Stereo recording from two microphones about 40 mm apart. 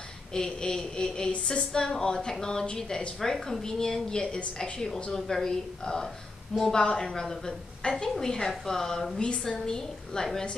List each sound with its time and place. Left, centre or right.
0.3 s a woman's voice: centre
2.6 s a woman's voice: left
3.2 s a woman's voice: centre
9.2 s a woman's voice: left